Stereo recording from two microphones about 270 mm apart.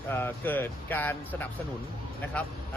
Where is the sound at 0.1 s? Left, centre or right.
Centre.